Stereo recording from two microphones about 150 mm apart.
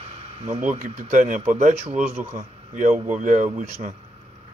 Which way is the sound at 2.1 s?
15° right (ahead or behind).